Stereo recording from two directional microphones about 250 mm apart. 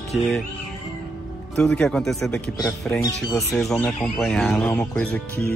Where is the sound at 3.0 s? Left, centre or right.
Centre.